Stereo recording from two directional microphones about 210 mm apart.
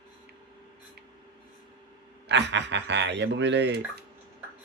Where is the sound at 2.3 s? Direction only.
60° right (ahead or behind).